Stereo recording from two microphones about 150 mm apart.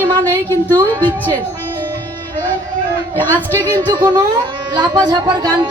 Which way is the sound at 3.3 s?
15° left (ahead or behind).